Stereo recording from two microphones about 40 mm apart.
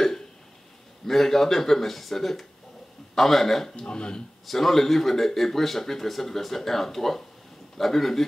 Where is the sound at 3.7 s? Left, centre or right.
Left.